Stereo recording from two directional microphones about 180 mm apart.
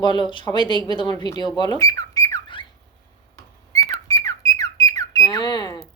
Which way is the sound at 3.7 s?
20° left (ahead or behind).